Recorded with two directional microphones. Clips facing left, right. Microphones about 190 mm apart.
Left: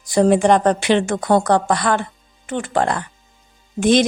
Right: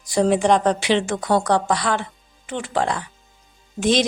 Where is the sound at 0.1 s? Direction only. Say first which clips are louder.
Left 3 dB; 55° left (ahead or behind).